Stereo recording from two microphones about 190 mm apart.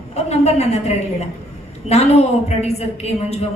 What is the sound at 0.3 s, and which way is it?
A woman's voice, 35° left (ahead or behind).